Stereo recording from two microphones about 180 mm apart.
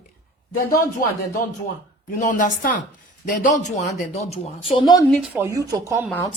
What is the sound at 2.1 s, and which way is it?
A woman's voice, 45° left (ahead or behind).